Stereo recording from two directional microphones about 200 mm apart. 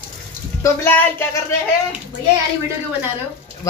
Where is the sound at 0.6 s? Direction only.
10° left (ahead or behind).